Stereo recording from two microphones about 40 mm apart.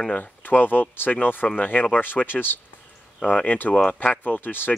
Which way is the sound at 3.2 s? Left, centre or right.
Left.